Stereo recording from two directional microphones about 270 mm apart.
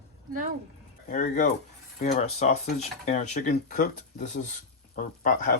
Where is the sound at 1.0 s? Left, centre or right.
Left.